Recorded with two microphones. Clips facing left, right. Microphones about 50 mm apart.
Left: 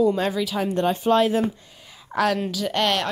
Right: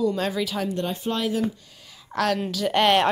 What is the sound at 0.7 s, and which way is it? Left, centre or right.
Speech, left.